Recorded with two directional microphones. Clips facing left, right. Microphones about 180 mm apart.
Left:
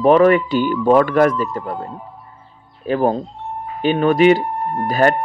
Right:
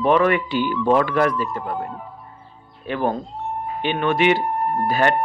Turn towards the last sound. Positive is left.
turn(degrees=40)  # may be behind; listen again after turning